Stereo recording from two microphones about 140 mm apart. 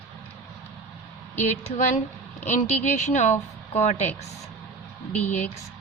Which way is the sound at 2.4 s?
55° left (ahead or behind).